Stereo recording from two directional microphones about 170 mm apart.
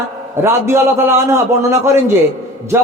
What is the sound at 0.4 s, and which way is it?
A man's voice, 15° right (ahead or behind).